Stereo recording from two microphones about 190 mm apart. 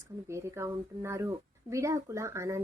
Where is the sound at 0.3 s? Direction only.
15° right (ahead or behind).